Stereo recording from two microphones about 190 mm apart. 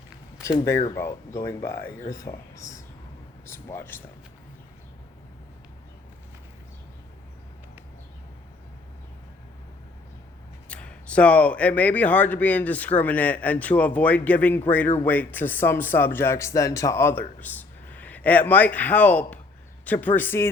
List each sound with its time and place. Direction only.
0.9 s speech: 15° left (ahead or behind)
3.4 s speech: 10° left (ahead or behind)
10.7 s speech: 5° left (ahead or behind)